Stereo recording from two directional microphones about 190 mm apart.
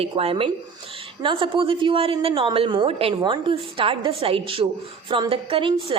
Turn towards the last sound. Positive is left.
turn(degrees=-30)  # may be behind; listen again after turning